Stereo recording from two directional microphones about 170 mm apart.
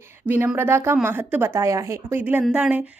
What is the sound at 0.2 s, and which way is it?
A woman's voice, 10° right (ahead or behind).